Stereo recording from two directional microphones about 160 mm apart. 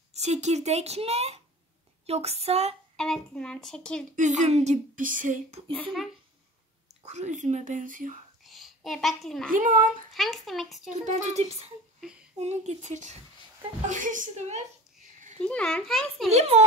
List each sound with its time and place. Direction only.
0.1 s speech: 45° right (ahead or behind)
2.0 s a sound: 40° right (ahead or behind)
3.0 s a woman's voice: 5° left (ahead or behind)
4.1 s speech: 50° right (ahead or behind)
5.7 s a woman's voice: 5° left (ahead or behind)
7.0 s speech: 45° right (ahead or behind)
8.5 s a child's voice: centre (ahead or behind)
10.9 s speech: 50° right (ahead or behind)
15.4 s a woman's voice: 5° left (ahead or behind)
16.3 s speech: 45° right (ahead or behind)